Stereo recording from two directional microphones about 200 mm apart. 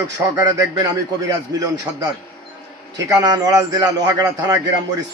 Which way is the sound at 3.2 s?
20° right (ahead or behind).